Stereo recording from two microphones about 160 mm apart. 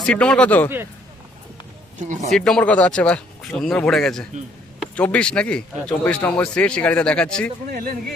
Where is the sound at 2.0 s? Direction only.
50° right (ahead or behind).